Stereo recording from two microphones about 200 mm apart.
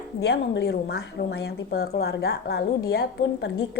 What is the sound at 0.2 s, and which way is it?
A woman's voice, 55° left (ahead or behind).